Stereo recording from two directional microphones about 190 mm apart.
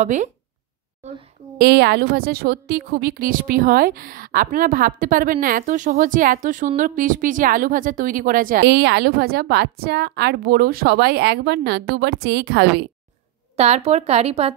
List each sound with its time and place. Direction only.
0.0 s a woman's voice: 40° right (ahead or behind)
1.6 s a woman's voice: 60° right (ahead or behind)
8.6 s a woman's voice: 65° right (ahead or behind)
13.6 s a woman's voice: 35° right (ahead or behind)